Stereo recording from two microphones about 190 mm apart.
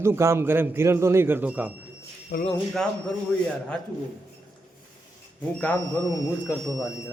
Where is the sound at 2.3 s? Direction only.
45° left (ahead or behind).